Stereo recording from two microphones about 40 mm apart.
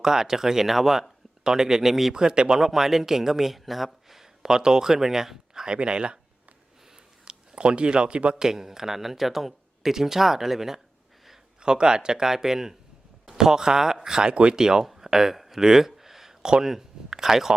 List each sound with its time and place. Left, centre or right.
0.0 s speech: centre
2.1 s speech: centre
2.6 s speech: centre
4.4 s speech: centre
5.6 s speech: right
6.9 s a sound: right
8.4 s speech: centre
11.6 s speech: centre
14.8 s a sound: centre